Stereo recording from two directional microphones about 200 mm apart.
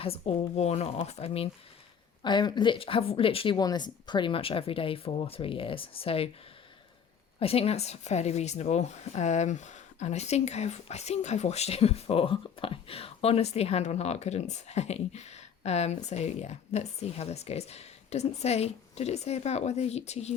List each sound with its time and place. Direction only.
0.0 s speech: 30° left (ahead or behind)
7.3 s speech: 30° left (ahead or behind)